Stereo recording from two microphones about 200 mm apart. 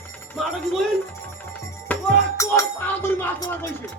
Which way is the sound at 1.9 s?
10° left (ahead or behind).